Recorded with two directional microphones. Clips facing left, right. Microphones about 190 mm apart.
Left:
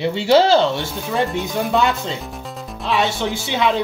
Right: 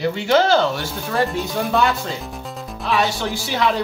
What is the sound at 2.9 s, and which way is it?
Speech, 20° left (ahead or behind).